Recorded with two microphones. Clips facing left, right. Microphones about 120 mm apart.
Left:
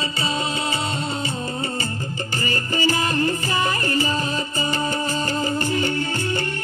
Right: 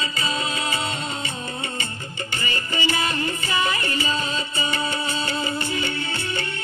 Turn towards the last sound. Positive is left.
turn(degrees=40)  # may be behind; listen again after turning